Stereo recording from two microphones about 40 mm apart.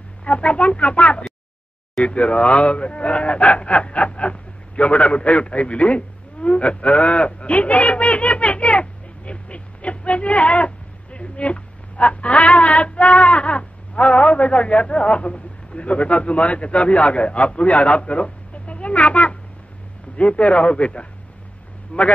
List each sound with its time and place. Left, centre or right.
0.2 s a man's voice: left